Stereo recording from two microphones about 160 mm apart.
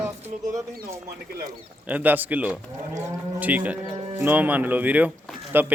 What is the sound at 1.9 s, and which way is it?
Speech, 10° right (ahead or behind).